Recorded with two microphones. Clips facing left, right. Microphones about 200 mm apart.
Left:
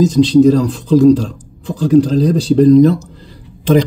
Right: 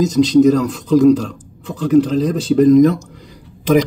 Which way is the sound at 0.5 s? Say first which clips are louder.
Left 2 dB; 30° left (ahead or behind).